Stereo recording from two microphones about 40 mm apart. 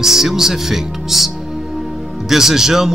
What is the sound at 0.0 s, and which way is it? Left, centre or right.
Speech, centre.